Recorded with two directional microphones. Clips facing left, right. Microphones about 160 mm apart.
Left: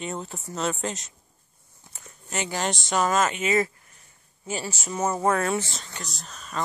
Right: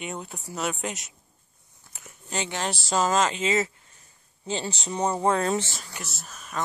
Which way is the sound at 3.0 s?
25° right (ahead or behind).